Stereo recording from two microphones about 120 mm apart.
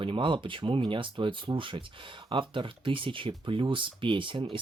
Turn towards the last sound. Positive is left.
turn(degrees=-45)  # may be behind; listen again after turning